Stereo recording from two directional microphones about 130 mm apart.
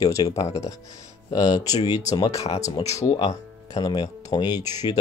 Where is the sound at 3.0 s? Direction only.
25° left (ahead or behind).